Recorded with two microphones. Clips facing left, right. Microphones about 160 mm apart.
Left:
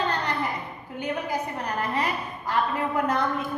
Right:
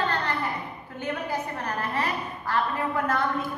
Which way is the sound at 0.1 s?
15° left (ahead or behind).